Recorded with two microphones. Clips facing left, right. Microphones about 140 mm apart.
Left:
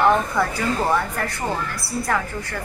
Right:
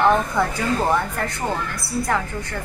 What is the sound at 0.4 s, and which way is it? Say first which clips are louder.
A woman's voice: right 1 dB; 20° right (ahead or behind).